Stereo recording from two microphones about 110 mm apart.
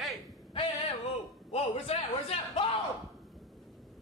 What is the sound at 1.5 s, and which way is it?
A man's voice, 65° left (ahead or behind).